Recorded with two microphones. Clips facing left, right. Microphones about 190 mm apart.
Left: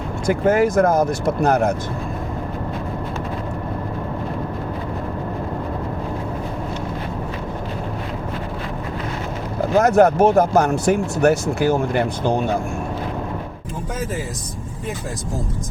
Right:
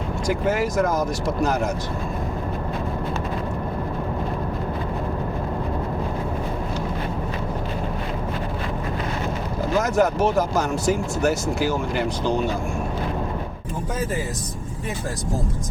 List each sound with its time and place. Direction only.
0.3 s speech: 55° left (ahead or behind)
9.7 s speech: 60° left (ahead or behind)